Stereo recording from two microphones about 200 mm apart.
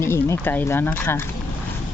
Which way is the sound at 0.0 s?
15° left (ahead or behind).